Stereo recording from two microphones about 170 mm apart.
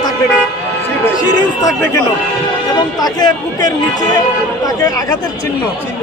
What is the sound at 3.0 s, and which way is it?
Speech, 25° left (ahead or behind).